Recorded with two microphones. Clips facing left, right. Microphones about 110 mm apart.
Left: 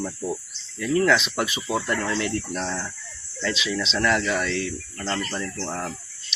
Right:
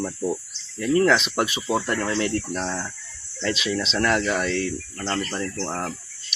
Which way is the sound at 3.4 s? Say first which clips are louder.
Right 2 dB; 45° right (ahead or behind).